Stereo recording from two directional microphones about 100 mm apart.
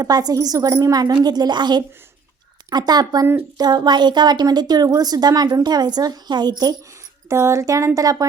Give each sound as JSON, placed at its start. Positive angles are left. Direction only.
{"t": 0.0, "sound": "a woman's voice", "side_deg": -40}
{"t": 7.3, "sound": "a woman's voice", "side_deg": -30}